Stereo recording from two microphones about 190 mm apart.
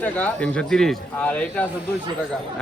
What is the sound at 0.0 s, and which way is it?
Speech, 5° left (ahead or behind).